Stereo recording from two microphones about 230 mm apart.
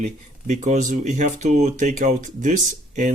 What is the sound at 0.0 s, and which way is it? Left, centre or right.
Speech, right.